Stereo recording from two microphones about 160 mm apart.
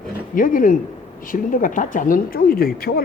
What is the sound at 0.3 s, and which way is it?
Speech, 60° left (ahead or behind).